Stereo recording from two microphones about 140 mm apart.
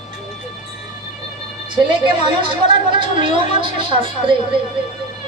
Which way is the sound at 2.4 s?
35° right (ahead or behind).